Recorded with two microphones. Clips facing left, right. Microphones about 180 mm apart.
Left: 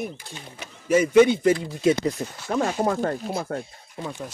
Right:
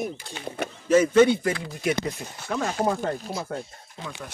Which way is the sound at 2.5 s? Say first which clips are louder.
Left 2 dB; 45° left (ahead or behind).